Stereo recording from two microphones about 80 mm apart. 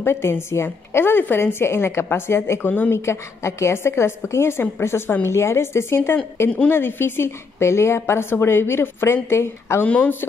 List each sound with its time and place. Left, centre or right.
0.0 s a woman's voice: left
9.8 s speech: centre